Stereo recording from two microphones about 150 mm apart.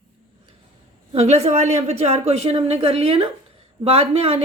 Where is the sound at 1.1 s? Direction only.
40° right (ahead or behind).